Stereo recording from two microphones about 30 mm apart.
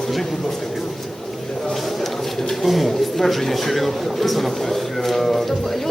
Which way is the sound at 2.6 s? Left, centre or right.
Centre.